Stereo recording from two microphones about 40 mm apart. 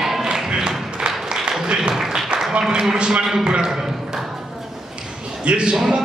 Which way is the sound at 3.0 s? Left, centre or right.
Right.